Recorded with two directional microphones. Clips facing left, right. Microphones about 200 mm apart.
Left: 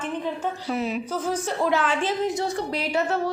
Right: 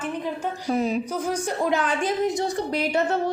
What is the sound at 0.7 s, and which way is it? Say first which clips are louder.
Music: right 4 dB; 40° right (ahead or behind).